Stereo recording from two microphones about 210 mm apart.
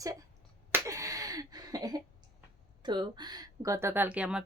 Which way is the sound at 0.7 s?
15° right (ahead or behind).